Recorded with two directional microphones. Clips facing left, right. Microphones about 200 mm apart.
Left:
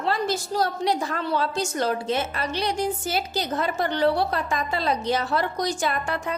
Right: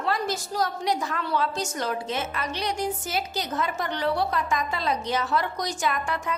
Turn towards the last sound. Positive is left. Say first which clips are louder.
# left 1 dB
turn(degrees=35)  # may be behind; listen again after turning